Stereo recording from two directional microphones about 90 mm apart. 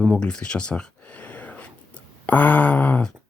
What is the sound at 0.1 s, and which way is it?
Speech, 10° left (ahead or behind).